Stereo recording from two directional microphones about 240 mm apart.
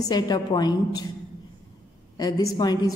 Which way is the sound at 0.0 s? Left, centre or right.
Centre.